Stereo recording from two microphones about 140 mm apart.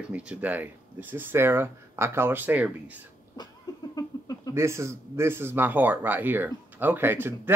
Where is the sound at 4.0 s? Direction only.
25° left (ahead or behind).